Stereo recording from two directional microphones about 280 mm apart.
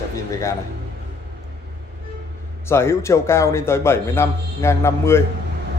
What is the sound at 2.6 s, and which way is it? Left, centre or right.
A man's voice, centre.